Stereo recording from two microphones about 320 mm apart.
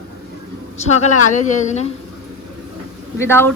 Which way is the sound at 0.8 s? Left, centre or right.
Left.